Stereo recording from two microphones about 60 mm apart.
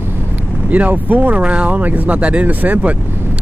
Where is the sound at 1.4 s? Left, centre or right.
Centre.